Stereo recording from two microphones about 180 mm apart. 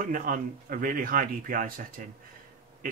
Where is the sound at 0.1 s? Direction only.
50° right (ahead or behind).